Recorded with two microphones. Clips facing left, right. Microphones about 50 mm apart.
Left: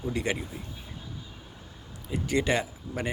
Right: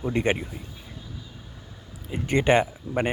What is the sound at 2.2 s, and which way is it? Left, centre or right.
Speech, right.